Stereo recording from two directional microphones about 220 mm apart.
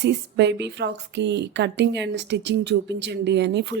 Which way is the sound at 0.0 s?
50° right (ahead or behind).